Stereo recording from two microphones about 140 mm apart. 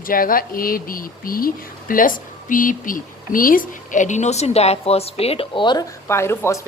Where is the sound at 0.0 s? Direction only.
90° left; by 5.8 s 35° left (ahead or behind).